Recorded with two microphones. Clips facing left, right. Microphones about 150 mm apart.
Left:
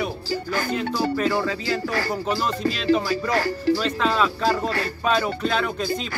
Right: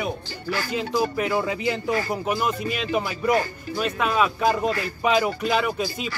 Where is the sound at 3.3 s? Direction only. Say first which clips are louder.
Left 1 dB; 80° left.